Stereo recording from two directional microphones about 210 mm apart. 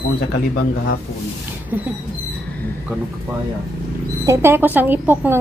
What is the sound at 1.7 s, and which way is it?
Speech, 10° right (ahead or behind).